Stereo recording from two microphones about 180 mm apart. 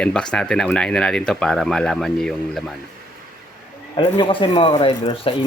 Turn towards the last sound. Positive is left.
turn(degrees=30)  # may be behind; listen again after turning